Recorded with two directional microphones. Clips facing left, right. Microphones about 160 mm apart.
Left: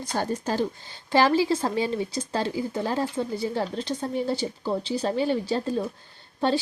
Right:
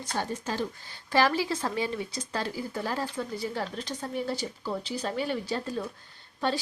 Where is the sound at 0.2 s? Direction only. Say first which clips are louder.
Left 5 dB; 35° left (ahead or behind).